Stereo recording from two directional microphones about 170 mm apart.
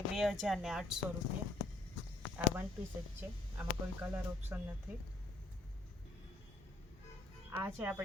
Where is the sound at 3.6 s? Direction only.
10° right (ahead or behind).